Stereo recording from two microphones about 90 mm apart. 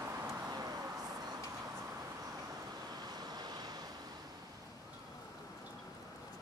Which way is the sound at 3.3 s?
50° right (ahead or behind).